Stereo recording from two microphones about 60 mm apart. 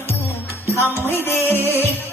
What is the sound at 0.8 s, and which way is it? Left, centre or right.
Music, left.